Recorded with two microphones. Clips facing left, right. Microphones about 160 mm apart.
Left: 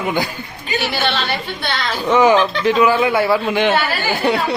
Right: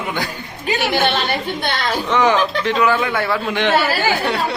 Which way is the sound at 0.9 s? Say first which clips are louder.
Right 3 dB; 50° right (ahead or behind).